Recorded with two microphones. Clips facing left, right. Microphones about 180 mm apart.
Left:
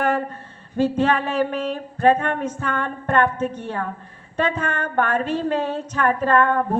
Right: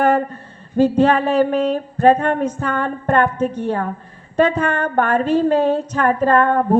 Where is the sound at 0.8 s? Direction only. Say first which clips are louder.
Right 5 dB; 40° right (ahead or behind).